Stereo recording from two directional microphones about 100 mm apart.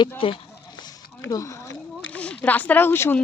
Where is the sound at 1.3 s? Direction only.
35° left (ahead or behind).